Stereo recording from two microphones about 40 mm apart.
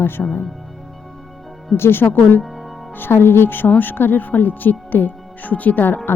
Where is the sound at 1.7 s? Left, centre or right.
Left.